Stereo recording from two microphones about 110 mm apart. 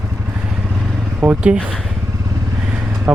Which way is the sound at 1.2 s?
15° right (ahead or behind).